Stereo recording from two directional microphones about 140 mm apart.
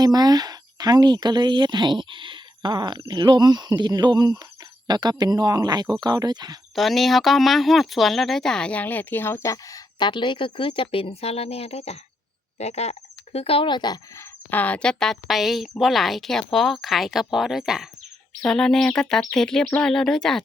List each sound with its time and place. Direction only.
0.0 s speech: 30° right (ahead or behind)
6.7 s speech: centre (ahead or behind); by 14.3 s 30° left (ahead or behind)
14.5 s a woman's voice: 10° left (ahead or behind)